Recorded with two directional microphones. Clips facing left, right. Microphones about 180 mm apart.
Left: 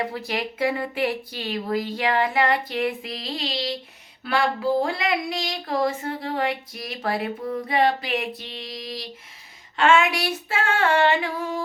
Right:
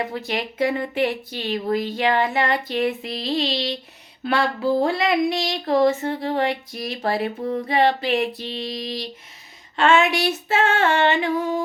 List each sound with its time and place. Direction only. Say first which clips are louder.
0.3 s speech: right 3 dB; 25° right (ahead or behind)
4.8 s speech: right 5 dB; 25° right (ahead or behind)